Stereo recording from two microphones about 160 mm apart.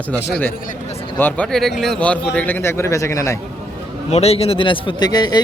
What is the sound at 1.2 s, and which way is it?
A man's voice, 5° left (ahead or behind).